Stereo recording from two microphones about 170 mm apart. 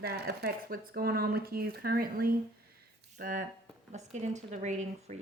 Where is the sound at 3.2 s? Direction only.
50° right (ahead or behind).